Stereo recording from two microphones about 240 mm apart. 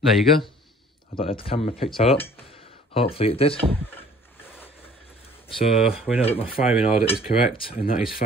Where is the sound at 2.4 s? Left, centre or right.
Left.